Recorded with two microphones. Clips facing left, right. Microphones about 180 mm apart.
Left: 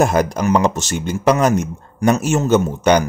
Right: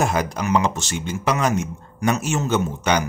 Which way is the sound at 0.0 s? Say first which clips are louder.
Left 6 dB; 45° left (ahead or behind).